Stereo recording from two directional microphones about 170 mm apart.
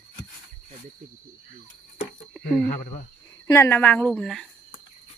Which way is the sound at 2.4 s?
50° left (ahead or behind).